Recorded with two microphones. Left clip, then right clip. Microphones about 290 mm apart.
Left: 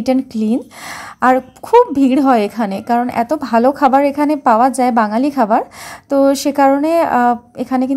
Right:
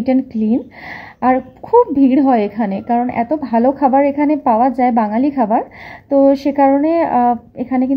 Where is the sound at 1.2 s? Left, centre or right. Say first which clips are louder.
Left 2 dB; left.